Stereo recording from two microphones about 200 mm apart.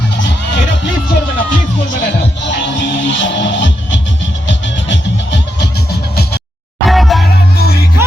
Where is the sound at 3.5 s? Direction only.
65° left (ahead or behind).